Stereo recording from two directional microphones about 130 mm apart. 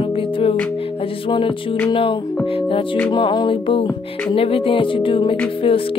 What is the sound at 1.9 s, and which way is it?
Music, 40° left (ahead or behind).